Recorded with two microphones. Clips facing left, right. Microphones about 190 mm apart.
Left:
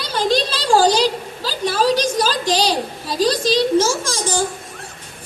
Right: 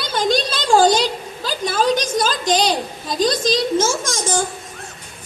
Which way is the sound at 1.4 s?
35° left (ahead or behind).